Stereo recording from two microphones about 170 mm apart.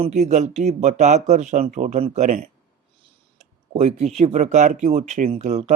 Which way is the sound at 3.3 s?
40° right (ahead or behind).